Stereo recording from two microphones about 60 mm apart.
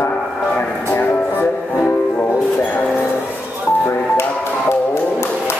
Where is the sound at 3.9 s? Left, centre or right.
Left.